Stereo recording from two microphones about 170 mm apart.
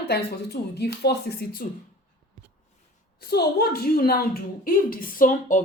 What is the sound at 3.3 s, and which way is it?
A woman's voice, 65° left (ahead or behind).